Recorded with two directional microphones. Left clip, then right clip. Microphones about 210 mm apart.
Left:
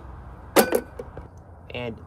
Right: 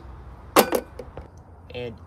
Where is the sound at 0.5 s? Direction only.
Centre (ahead or behind).